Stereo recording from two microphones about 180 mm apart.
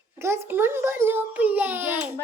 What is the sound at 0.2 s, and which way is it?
A woman's voice, 15° right (ahead or behind).